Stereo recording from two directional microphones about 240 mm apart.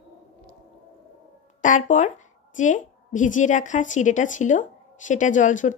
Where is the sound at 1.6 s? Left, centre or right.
Left.